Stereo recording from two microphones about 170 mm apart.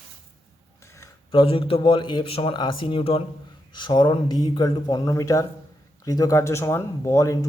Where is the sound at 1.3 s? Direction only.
30° left (ahead or behind).